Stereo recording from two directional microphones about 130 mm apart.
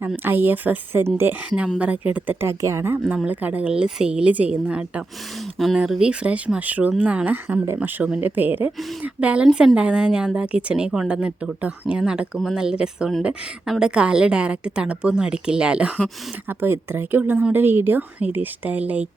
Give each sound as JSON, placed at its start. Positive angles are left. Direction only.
{"t": 0.3, "sound": "a woman's voice", "side_deg": -15}
{"t": 8.8, "sound": "speech", "side_deg": 0}
{"t": 9.0, "sound": "a woman's voice", "side_deg": -10}
{"t": 16.5, "sound": "a woman's voice", "side_deg": -20}